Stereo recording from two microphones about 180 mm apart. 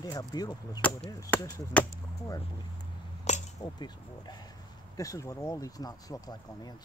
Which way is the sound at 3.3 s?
40° left (ahead or behind).